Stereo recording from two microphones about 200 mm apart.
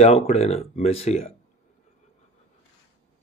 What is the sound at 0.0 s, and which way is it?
Speech, 30° left (ahead or behind).